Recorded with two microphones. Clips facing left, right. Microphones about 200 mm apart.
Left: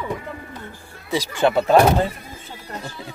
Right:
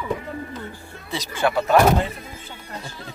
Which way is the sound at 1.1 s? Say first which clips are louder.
Left 4 dB; 20° left (ahead or behind).